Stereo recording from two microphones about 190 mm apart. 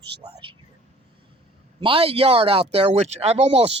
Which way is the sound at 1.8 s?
30° right (ahead or behind).